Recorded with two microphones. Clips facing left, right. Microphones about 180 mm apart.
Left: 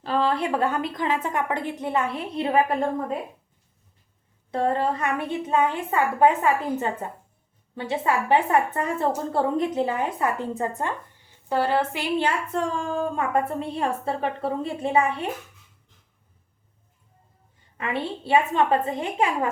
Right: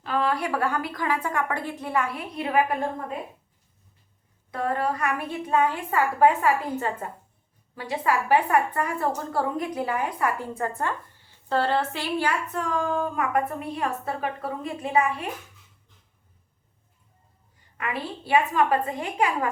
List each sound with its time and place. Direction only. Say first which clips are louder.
0.0 s a woman's voice: left 2 dB; 30° left (ahead or behind)
4.5 s a woman's voice: left 3 dB; 25° left (ahead or behind)
17.7 s a woman's voice: left 3 dB; 25° left (ahead or behind)